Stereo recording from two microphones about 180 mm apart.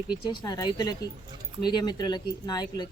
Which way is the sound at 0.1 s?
20° left (ahead or behind).